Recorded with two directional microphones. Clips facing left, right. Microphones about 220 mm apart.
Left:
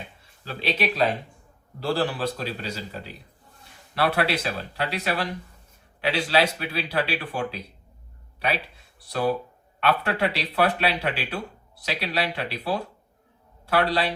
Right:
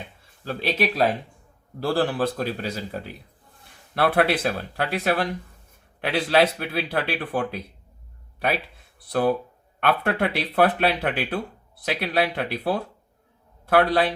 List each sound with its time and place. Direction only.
0.4 s speech: 50° right (ahead or behind)
9.0 s speech: 50° right (ahead or behind)